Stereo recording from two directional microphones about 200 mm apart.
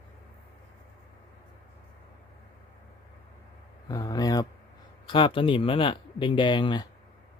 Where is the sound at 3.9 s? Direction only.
20° left (ahead or behind).